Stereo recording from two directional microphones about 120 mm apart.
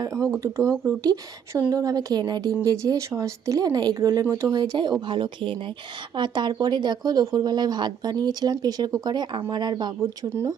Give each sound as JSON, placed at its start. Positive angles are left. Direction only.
{"t": 0.3, "sound": "speech", "side_deg": -20}
{"t": 10.0, "sound": "speech", "side_deg": -25}